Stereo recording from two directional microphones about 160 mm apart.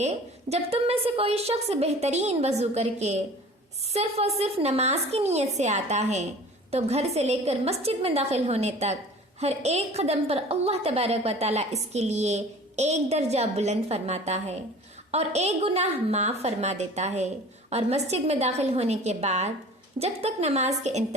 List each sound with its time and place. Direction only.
0.5 s a woman's voice: 40° right (ahead or behind)